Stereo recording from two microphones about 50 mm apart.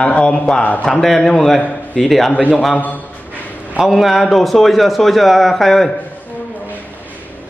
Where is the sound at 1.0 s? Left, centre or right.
Centre.